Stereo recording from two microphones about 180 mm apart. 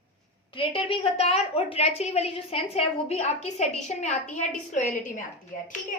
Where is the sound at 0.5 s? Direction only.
30° left (ahead or behind).